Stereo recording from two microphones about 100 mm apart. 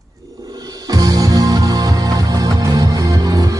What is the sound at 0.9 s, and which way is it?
Music, 40° right (ahead or behind).